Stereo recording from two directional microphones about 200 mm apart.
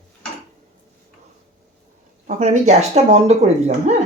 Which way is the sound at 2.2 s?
35° right (ahead or behind).